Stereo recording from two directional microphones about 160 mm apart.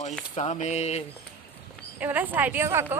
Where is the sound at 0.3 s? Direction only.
45° left (ahead or behind).